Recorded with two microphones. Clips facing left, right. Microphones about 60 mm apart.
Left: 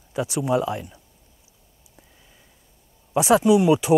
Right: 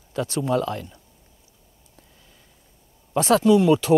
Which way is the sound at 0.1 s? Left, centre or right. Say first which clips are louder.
Left 1 dB; centre.